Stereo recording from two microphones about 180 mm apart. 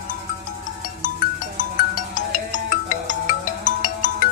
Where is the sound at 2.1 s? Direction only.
45° left (ahead or behind).